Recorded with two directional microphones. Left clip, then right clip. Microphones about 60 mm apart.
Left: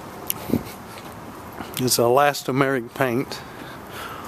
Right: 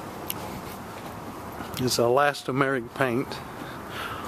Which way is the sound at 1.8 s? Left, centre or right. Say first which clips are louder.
Left 4 dB; left.